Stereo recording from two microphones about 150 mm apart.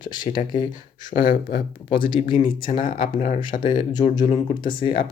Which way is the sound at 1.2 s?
35° left (ahead or behind).